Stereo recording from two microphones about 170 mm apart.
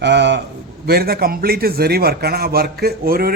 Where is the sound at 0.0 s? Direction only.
90° right.